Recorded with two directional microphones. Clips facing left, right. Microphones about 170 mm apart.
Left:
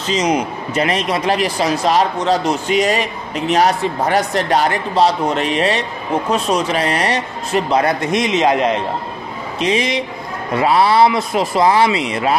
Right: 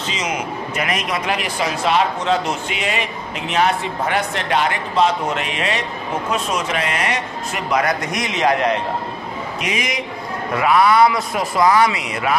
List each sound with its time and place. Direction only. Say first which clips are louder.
0.1 s a man's voice: left 9 dB; 35° left (ahead or behind)